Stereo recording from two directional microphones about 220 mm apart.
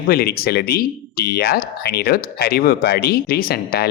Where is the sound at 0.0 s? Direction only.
45° left (ahead or behind).